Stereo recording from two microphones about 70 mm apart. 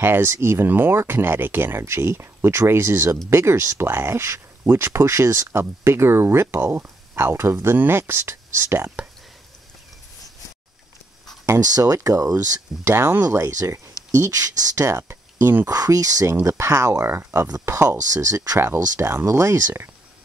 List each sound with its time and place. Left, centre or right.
0.0 s speech: right
11.6 s speech: right
12.8 s speech: right
13.5 s speech: right
15.7 s speech: right
16.4 s speech: right
17.6 s speech: right
18.6 s speech: right